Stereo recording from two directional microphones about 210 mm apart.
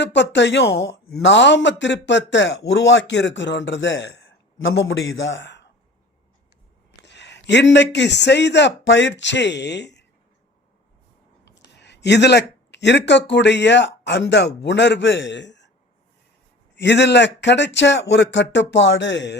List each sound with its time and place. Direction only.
0.0 s speech: 55° left (ahead or behind)
7.0 s a man's voice: 55° left (ahead or behind)
11.8 s speech: 55° left (ahead or behind)
16.7 s speech: 55° left (ahead or behind)